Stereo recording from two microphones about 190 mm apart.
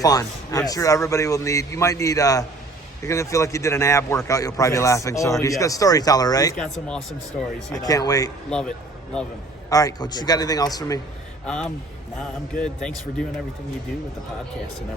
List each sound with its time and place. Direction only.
0.0 s a man's voice: 20° left (ahead or behind)
6.6 s a man's voice: 5° left (ahead or behind)
7.8 s a man's voice: 20° left (ahead or behind)
8.4 s a man's voice: 5° left (ahead or behind)
9.6 s a man's voice: 20° left (ahead or behind)
11.4 s a man's voice: 5° left (ahead or behind)